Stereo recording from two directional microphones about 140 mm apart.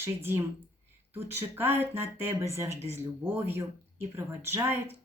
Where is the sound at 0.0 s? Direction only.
15° right (ahead or behind).